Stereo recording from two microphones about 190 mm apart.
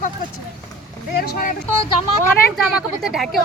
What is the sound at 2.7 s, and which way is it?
Speech, 5° right (ahead or behind).